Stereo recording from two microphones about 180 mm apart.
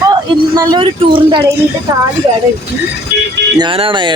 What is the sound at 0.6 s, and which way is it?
Speech, 25° right (ahead or behind).